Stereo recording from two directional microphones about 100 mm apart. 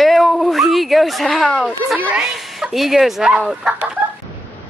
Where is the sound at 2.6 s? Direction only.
Centre (ahead or behind).